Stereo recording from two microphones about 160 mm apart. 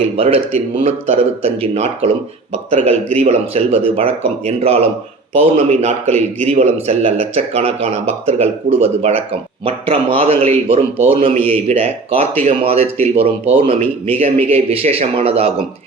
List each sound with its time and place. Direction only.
0.2 s a man's voice: 35° right (ahead or behind)